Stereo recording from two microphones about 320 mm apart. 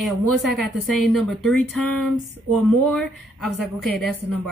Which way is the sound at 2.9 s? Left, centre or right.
Centre.